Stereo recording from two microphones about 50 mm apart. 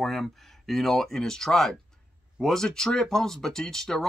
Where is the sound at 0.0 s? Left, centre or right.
Centre.